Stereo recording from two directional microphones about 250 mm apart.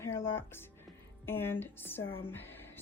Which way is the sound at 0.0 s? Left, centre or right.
Centre.